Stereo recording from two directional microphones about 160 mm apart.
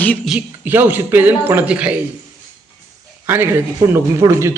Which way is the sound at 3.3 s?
15° right (ahead or behind).